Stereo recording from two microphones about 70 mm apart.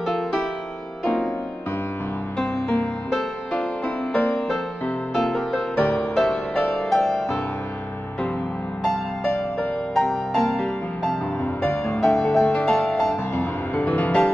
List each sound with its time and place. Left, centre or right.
0.0 s music: centre
1.0 s music: centre
3.1 s music: centre
8.8 s music: centre
13.3 s music: left
13.8 s music: left